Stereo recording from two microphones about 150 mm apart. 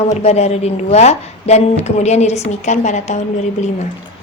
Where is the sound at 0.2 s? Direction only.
45° left (ahead or behind).